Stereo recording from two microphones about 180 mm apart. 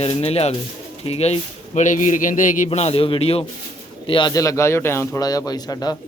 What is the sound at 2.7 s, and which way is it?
A man's voice, 35° left (ahead or behind).